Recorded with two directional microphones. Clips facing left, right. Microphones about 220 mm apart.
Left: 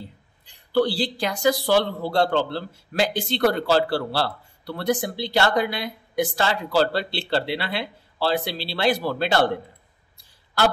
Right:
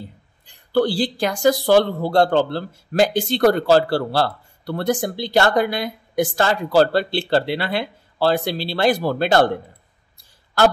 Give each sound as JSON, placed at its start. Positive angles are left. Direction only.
{"t": 0.7, "sound": "speech", "side_deg": -45}